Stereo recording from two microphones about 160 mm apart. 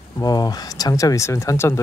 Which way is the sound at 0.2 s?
25° left (ahead or behind).